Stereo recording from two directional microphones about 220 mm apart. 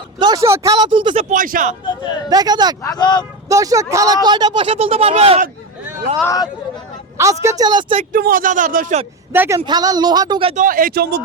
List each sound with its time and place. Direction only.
0.2 s speech: 15° right (ahead or behind); by 1.7 s 40° right (ahead or behind)
2.3 s speech: 20° right (ahead or behind)
2.8 s speech: 20° left (ahead or behind)
3.5 s speech: 15° right (ahead or behind)
6.2 s speech: 15° left (ahead or behind)
7.2 s speech: 15° right (ahead or behind)
8.1 s speech: 40° right (ahead or behind)
9.3 s speech: 10° right (ahead or behind)
9.6 s speech: 20° right (ahead or behind)
10.5 s speech: 35° right (ahead or behind)